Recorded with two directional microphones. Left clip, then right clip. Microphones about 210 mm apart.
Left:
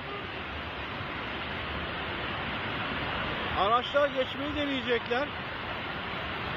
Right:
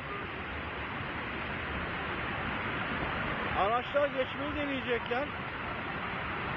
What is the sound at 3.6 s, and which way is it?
Speech, 15° left (ahead or behind).